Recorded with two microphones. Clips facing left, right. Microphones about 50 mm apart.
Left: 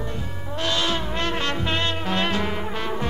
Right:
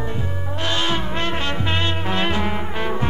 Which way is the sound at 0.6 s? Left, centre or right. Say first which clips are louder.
Right 1 dB; right.